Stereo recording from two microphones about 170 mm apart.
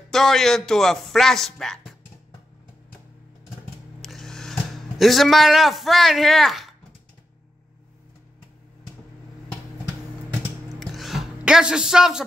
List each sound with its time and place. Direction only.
0.1 s a man's voice: centre (ahead or behind)
4.0 s speech: centre (ahead or behind)
10.8 s music: centre (ahead or behind)